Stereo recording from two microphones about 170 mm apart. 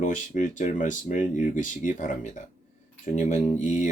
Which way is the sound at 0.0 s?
50° left (ahead or behind).